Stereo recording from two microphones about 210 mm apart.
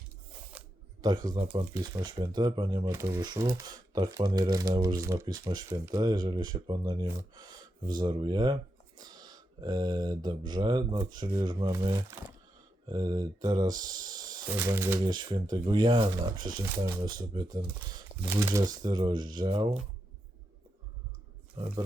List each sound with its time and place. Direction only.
0.5 s a sound: 5° right (ahead or behind)
1.0 s speech: 20° right (ahead or behind)
21.6 s speech: 25° right (ahead or behind)